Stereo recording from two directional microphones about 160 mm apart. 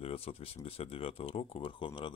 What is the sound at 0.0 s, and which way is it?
Speech, 35° left (ahead or behind).